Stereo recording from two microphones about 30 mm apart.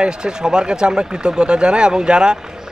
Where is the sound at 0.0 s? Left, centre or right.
Right.